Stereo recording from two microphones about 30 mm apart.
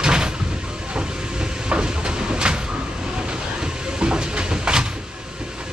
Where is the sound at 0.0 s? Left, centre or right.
Right.